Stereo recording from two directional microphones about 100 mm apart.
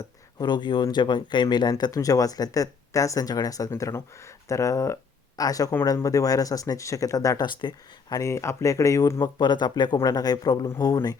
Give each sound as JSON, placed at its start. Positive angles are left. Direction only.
{"t": 0.0, "sound": "speech", "side_deg": 45}
{"t": 1.8, "sound": "speech", "side_deg": 35}
{"t": 7.6, "sound": "speech", "side_deg": 45}
{"t": 8.1, "sound": "speech", "side_deg": 30}
{"t": 9.4, "sound": "speech", "side_deg": 50}